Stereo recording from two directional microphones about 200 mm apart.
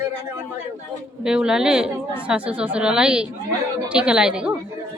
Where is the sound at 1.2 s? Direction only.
5° right (ahead or behind).